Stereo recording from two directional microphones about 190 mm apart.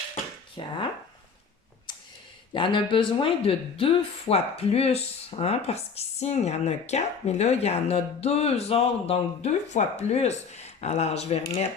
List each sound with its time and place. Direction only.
0.6 s speech: 25° left (ahead or behind)
2.5 s speech: 25° left (ahead or behind)